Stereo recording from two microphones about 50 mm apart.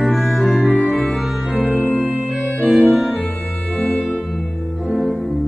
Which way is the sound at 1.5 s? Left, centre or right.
Left.